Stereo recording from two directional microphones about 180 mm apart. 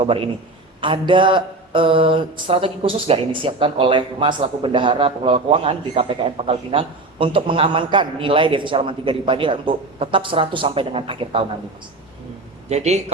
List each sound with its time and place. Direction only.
0.0 s mantra: 30° right (ahead or behind)
12.6 s a man's voice: 40° right (ahead or behind)